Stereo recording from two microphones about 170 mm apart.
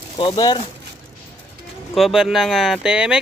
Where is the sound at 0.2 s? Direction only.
25° left (ahead or behind).